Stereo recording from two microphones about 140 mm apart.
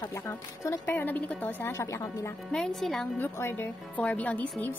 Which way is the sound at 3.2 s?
15° left (ahead or behind).